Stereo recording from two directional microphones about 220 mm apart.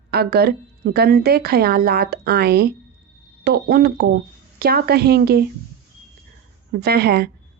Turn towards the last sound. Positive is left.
turn(degrees=-45)  # may be behind; listen again after turning